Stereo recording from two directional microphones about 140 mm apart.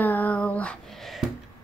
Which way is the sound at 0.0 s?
10° left (ahead or behind).